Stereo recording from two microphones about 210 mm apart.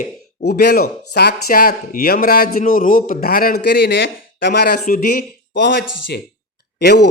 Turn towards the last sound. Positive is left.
turn(degrees=55)  # may be behind; listen again after turning